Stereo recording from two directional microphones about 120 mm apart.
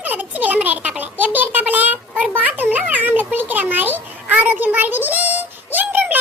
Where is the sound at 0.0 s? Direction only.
15° right (ahead or behind).